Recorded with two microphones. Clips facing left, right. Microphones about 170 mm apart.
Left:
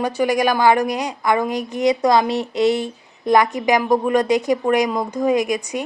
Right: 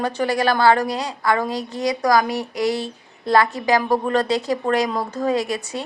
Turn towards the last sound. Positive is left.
turn(degrees=15)  # may be behind; listen again after turning